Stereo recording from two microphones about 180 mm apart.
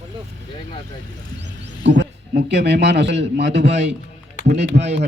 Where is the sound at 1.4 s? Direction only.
75° right (ahead or behind).